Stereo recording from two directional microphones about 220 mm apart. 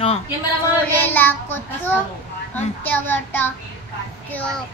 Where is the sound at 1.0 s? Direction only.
10° left (ahead or behind).